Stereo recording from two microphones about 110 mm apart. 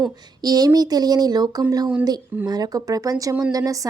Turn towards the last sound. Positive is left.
turn(degrees=-30)  # may be behind; listen again after turning